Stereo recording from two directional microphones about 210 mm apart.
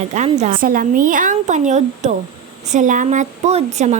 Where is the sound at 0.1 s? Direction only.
35° right (ahead or behind).